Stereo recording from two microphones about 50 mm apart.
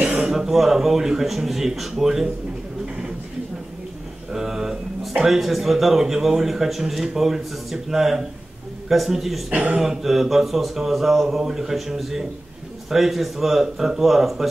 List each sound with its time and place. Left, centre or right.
0.3 s speech: centre
4.3 s speech: centre
9.5 s speech: right
9.8 s speech: centre